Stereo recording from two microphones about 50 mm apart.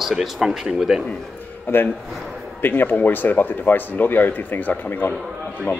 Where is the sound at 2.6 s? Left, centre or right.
Left.